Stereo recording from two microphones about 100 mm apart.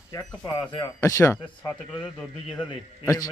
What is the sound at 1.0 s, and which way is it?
Speech, 30° left (ahead or behind).